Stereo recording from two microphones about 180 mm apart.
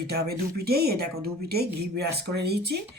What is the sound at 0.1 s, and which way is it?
Speech, 60° right (ahead or behind).